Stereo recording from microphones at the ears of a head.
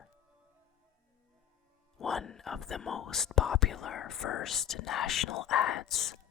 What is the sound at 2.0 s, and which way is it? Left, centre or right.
Speech, left.